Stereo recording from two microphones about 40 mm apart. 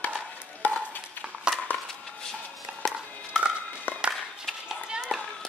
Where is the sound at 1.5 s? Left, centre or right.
Right.